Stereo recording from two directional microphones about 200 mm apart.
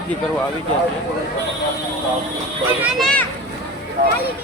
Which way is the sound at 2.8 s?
Centre (ahead or behind).